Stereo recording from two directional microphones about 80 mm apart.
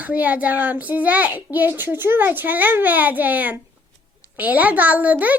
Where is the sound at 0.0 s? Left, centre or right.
Centre.